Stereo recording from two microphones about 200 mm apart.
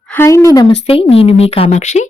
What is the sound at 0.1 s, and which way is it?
Speech, 10° left (ahead or behind).